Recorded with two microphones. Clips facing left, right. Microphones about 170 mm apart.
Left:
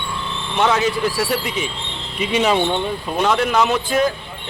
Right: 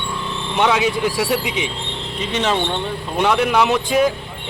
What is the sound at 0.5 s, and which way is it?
Speech, 10° right (ahead or behind).